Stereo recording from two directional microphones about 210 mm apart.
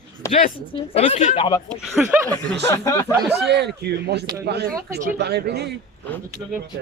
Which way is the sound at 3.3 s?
55° right (ahead or behind).